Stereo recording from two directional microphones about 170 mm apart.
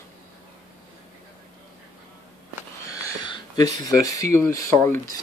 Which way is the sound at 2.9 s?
20° left (ahead or behind).